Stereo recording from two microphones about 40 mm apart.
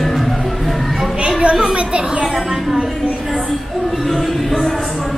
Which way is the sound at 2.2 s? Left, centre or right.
Centre.